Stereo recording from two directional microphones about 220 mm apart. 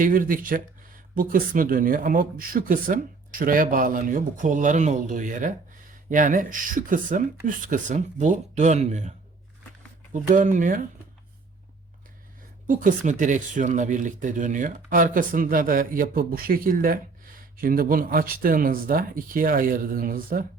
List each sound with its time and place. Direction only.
0.0 s speech: 40° right (ahead or behind)
12.6 s speech: 35° right (ahead or behind)